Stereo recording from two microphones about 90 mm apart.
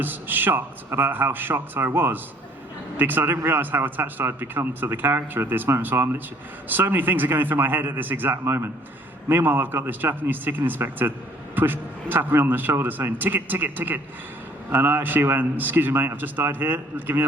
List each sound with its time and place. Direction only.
0.0 s speech: 20° right (ahead or behind)